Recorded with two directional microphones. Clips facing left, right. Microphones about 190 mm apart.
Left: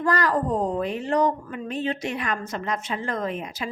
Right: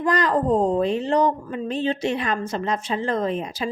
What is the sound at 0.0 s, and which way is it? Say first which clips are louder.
A woman's voice: right 2 dB; 20° right (ahead or behind).